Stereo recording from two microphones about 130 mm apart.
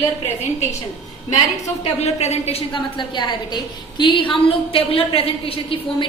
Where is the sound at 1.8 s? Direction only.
55° left (ahead or behind).